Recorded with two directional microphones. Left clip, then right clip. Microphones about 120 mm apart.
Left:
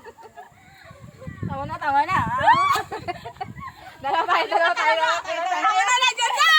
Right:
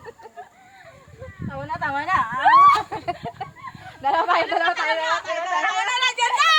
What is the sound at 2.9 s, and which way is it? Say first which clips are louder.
Chicken: right 2 dB; 55° right (ahead or behind).